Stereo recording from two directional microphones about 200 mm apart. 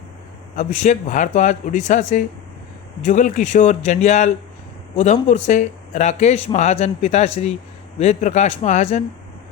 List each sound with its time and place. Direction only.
0.5 s speech: 35° left (ahead or behind)